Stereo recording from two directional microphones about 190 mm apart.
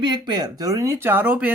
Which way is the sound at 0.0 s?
20° right (ahead or behind).